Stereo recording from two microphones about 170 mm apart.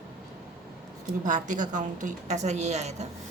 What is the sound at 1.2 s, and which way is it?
A woman's voice, 45° right (ahead or behind).